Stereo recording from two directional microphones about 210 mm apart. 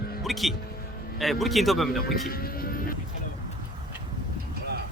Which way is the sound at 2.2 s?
45° left (ahead or behind).